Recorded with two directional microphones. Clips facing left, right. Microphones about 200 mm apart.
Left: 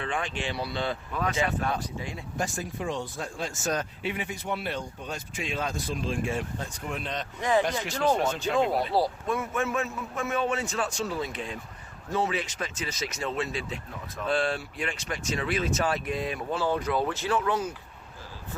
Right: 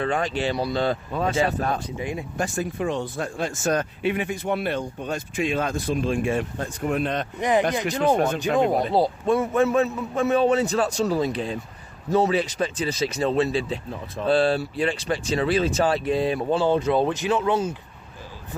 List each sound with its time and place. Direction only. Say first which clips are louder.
0.0 s speech: right 8 dB; 40° right (ahead or behind)
1.8 s speech: right 6 dB; 15° right (ahead or behind)
2.4 s speech: right 5 dB; 65° right (ahead or behind)
8.9 s speech: right 5 dB; 20° right (ahead or behind)
9.3 s speech: right 12 dB; 35° right (ahead or behind)